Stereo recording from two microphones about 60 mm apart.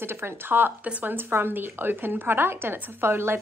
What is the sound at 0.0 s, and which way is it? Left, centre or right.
A woman's voice, right.